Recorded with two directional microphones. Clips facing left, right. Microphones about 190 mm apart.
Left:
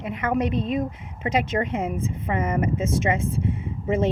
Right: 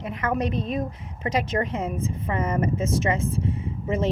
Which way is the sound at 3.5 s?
25° left (ahead or behind).